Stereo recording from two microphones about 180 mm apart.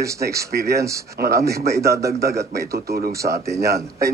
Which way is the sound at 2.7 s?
60° right (ahead or behind).